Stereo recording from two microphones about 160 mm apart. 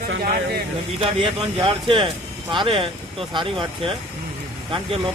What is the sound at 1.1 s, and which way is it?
Speech, 35° right (ahead or behind).